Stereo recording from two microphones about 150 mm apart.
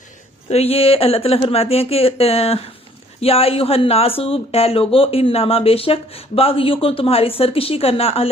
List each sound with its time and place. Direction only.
0.5 s speech: 40° left (ahead or behind)